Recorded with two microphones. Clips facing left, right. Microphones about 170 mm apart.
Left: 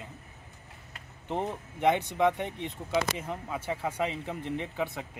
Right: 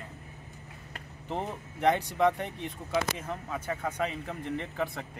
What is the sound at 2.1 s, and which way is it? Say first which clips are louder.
Speech: even; 20° left (ahead or behind).